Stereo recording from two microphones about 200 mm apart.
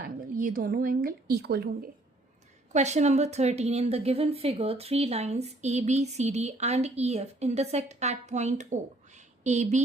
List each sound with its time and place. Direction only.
0.0 s speech: 45° right (ahead or behind)
2.7 s a woman's voice: 35° right (ahead or behind)